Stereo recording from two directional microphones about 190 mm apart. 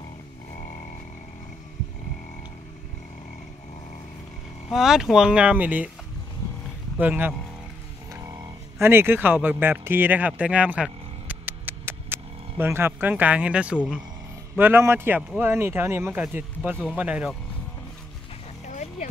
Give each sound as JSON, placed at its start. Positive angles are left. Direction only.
{"t": 4.6, "sound": "speech", "side_deg": 0}
{"t": 7.0, "sound": "speech", "side_deg": -10}
{"t": 8.7, "sound": "speech", "side_deg": -10}
{"t": 18.7, "sound": "a sound", "side_deg": 40}